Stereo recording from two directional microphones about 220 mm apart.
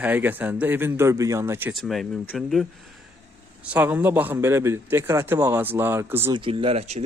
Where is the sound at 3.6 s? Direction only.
5° right (ahead or behind).